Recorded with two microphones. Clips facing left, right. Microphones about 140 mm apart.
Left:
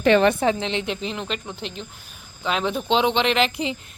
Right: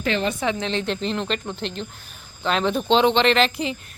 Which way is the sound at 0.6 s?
15° left (ahead or behind).